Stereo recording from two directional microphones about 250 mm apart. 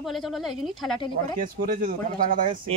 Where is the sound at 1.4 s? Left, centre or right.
Right.